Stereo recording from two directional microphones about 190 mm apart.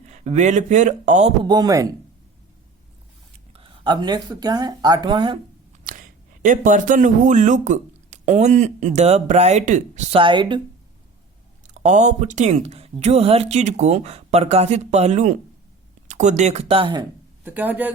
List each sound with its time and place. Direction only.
0.0 s speech: 40° right (ahead or behind)
1.5 s speech: 20° right (ahead or behind)
3.5 s speech: 30° right (ahead or behind)
5.8 s speech: 45° right (ahead or behind); by 10.6 s 25° right (ahead or behind)
11.6 s speech: 40° right (ahead or behind)
17.4 s speech: 10° right (ahead or behind)